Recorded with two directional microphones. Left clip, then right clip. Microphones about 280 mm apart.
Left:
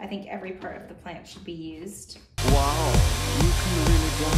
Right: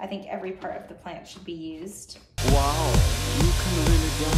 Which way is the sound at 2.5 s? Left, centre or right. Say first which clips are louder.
Even; left.